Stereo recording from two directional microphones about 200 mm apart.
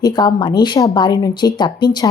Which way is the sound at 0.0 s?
20° left (ahead or behind).